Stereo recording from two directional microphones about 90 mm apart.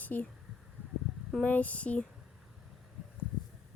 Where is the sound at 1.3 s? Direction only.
15° left (ahead or behind).